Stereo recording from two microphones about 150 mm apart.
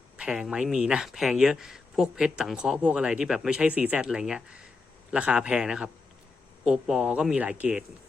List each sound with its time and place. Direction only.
0.2 s a man's voice: 5° right (ahead or behind)